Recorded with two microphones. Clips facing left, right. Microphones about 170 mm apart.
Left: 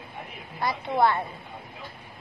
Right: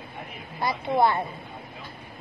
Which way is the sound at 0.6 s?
15° right (ahead or behind).